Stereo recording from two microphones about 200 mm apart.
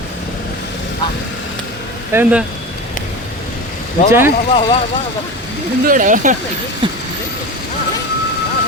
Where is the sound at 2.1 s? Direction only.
10° right (ahead or behind).